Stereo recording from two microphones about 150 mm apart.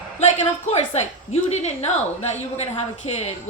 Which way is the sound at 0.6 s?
50° left (ahead or behind).